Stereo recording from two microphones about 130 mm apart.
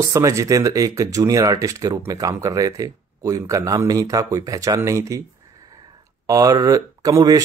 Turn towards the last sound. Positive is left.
turn(degrees=-30)  # may be behind; listen again after turning